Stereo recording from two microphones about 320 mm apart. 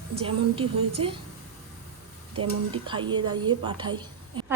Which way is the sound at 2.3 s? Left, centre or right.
Centre.